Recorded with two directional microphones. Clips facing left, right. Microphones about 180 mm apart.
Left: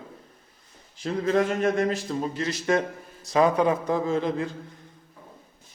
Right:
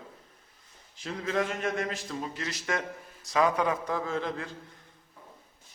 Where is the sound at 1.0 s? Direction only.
40° left (ahead or behind); by 4.5 s 20° left (ahead or behind).